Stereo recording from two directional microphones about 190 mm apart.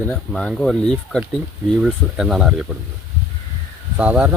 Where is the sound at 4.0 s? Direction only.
5° right (ahead or behind).